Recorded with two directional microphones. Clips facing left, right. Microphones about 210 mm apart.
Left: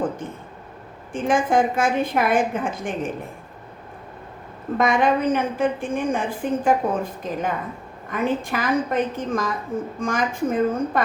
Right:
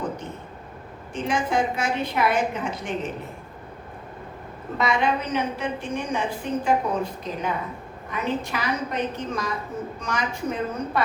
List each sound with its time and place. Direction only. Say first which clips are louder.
1.1 s a woman's voice: left 5 dB; 50° left (ahead or behind)
4.8 s a woman's voice: left 5 dB; 50° left (ahead or behind)